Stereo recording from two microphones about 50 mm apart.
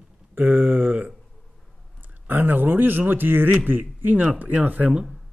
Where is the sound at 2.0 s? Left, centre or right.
Right.